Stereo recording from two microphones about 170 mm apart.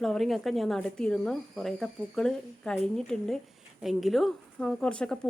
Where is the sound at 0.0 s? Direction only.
Centre (ahead or behind).